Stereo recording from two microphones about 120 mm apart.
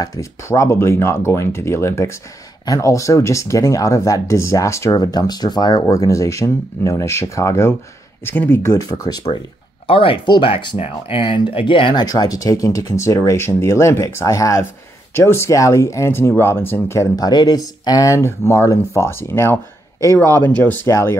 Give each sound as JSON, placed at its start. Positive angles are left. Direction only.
{"t": 0.0, "sound": "speech", "side_deg": 30}
{"t": 9.8, "sound": "speech", "side_deg": 50}